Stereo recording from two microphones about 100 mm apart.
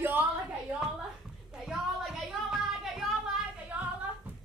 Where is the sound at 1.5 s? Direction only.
5° right (ahead or behind).